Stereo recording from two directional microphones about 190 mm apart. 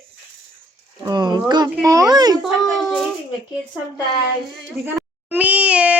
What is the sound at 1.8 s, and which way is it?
Speech, 15° right (ahead or behind).